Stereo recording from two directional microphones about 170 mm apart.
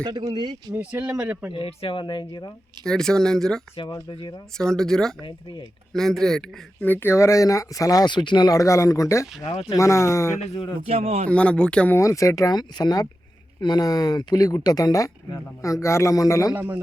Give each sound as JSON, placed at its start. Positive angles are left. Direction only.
{"t": 0.0, "sound": "speech", "side_deg": -25}
{"t": 0.8, "sound": "speech", "side_deg": -10}
{"t": 1.5, "sound": "speech", "side_deg": 30}
{"t": 2.8, "sound": "speech", "side_deg": 5}
{"t": 3.8, "sound": "speech", "side_deg": 25}
{"t": 4.5, "sound": "speech", "side_deg": 5}
{"t": 5.2, "sound": "speech", "side_deg": 30}
{"t": 5.9, "sound": "speech", "side_deg": 5}
{"t": 9.4, "sound": "speech", "side_deg": 30}
{"t": 9.7, "sound": "speech", "side_deg": 15}
{"t": 10.5, "sound": "speech", "side_deg": 30}
{"t": 10.8, "sound": "speech", "side_deg": -35}
{"t": 11.3, "sound": "speech", "side_deg": 5}
{"t": 16.6, "sound": "speech", "side_deg": -10}